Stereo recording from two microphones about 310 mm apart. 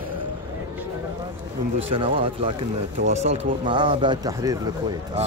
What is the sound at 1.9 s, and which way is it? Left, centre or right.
Speech, centre.